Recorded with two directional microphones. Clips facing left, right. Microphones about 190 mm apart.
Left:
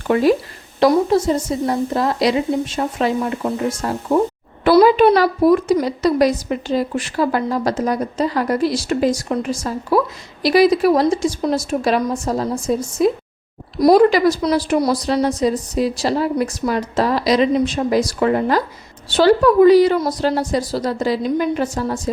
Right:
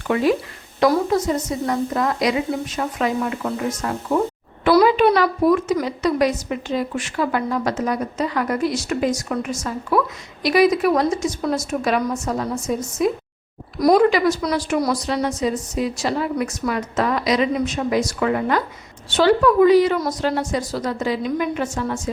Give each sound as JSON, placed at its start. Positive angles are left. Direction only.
{"t": 0.1, "sound": "a woman's voice", "side_deg": 40}
{"t": 4.6, "sound": "a sound", "side_deg": 35}
{"t": 5.8, "sound": "a woman's voice", "side_deg": 35}